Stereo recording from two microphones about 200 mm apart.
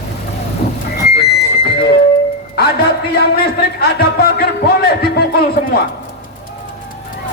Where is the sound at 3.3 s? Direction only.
55° left (ahead or behind).